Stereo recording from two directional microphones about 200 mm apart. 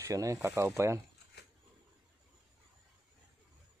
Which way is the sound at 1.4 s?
55° left (ahead or behind).